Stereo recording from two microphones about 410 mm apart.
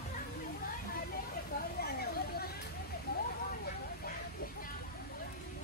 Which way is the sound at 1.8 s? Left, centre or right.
Left.